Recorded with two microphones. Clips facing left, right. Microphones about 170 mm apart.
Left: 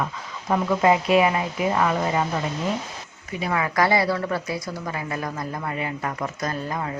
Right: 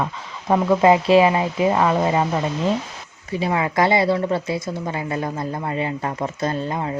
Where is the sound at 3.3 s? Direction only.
25° right (ahead or behind).